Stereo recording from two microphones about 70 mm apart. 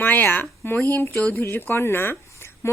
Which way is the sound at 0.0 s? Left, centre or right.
Left.